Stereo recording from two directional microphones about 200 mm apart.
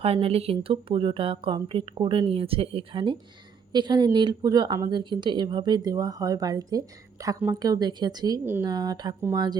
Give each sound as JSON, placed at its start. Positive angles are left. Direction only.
{"t": 0.0, "sound": "speech", "side_deg": -30}